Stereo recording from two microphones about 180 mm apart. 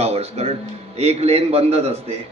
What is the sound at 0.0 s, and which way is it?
A man's voice, 35° right (ahead or behind).